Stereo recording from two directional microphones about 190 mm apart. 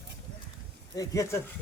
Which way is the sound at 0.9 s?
15° left (ahead or behind).